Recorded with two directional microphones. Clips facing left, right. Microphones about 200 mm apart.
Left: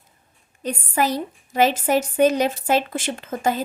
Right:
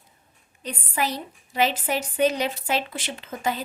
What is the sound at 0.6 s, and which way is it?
A woman's voice, 45° left (ahead or behind).